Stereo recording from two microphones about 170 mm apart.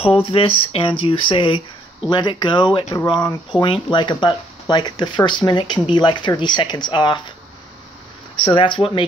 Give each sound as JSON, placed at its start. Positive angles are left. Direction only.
{"t": 0.0, "sound": "speech", "side_deg": 35}
{"t": 8.4, "sound": "speech", "side_deg": 30}